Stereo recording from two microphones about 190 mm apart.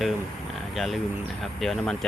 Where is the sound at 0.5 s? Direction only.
Centre (ahead or behind).